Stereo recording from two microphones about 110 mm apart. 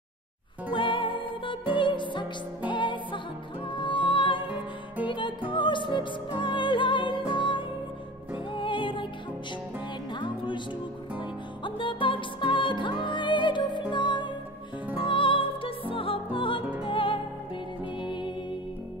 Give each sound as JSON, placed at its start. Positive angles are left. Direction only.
{"t": 0.7, "sound": "music", "side_deg": 50}
{"t": 4.4, "sound": "music", "side_deg": -15}
{"t": 5.0, "sound": "music", "side_deg": 50}
{"t": 10.1, "sound": "music", "side_deg": 45}